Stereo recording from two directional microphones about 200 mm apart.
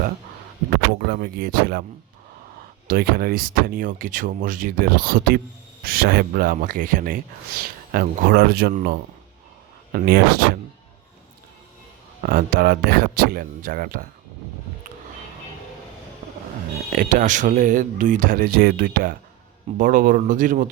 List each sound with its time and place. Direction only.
0.7 s speech: 55° right (ahead or behind)
2.8 s speech: 50° right (ahead or behind)
12.2 s speech: 45° right (ahead or behind)
16.9 s speech: 45° right (ahead or behind)